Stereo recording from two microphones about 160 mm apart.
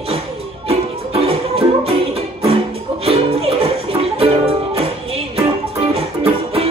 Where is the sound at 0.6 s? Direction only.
40° right (ahead or behind).